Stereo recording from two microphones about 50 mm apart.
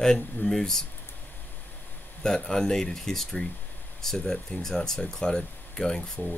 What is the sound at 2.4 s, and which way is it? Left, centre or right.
Speech, centre.